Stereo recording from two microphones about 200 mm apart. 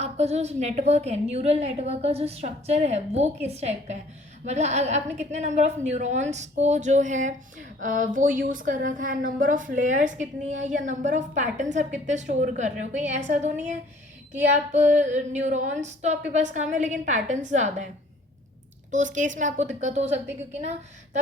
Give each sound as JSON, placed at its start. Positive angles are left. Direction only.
{"t": 0.0, "sound": "a woman's voice", "side_deg": -35}
{"t": 18.9, "sound": "a woman's voice", "side_deg": -40}